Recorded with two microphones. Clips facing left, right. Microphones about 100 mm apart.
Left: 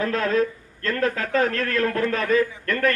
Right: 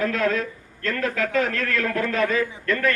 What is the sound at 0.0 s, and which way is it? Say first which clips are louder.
A man's voice: left 1 dB; 40° left (ahead or behind).